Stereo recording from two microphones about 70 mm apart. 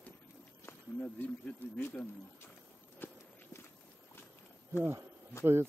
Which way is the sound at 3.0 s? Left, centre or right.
Left.